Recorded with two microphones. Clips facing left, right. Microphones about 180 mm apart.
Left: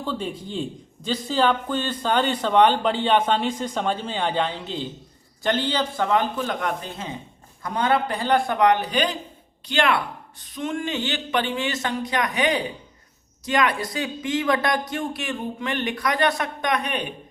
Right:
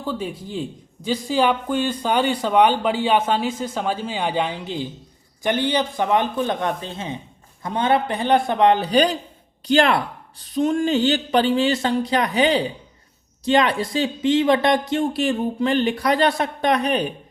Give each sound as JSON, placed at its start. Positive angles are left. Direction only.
{"t": 0.0, "sound": "speech", "side_deg": -5}